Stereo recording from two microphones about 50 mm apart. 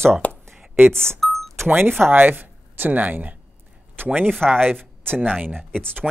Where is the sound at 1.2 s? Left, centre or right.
Centre.